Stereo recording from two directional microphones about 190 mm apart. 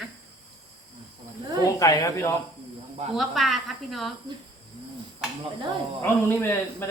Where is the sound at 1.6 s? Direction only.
20° left (ahead or behind).